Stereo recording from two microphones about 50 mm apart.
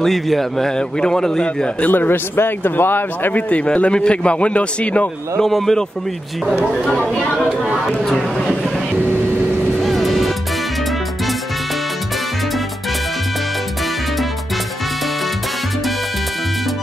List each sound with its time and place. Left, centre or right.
0.0 s a man's voice: centre
1.9 s a man's voice: left
3.3 s a man's voice: left
5.4 s a man's voice: centre
9.8 s music: centre